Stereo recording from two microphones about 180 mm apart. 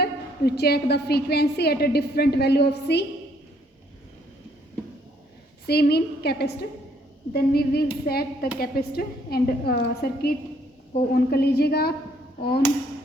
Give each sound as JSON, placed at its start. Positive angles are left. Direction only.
{"t": 0.0, "sound": "a woman's voice", "side_deg": 60}
{"t": 5.6, "sound": "a woman's voice", "side_deg": 60}